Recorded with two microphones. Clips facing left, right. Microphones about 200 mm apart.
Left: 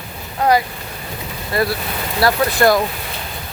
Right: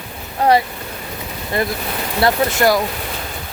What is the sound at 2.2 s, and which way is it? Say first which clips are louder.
Speech: left 1 dB; 25° right (ahead or behind).